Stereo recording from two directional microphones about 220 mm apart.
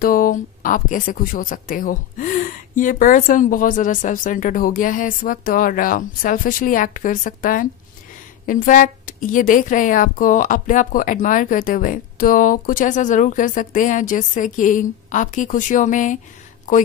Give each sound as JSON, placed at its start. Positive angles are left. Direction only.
{"t": 0.0, "sound": "a woman's voice", "side_deg": 40}